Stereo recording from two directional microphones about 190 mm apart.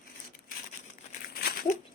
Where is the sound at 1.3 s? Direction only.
50° left (ahead or behind).